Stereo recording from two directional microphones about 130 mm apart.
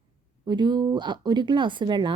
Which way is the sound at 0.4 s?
35° right (ahead or behind).